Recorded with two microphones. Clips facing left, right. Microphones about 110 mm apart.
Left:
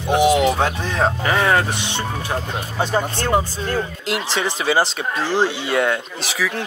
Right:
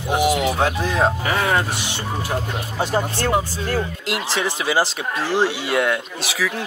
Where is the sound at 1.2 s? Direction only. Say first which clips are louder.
Left 3 dB; 45° left (ahead or behind).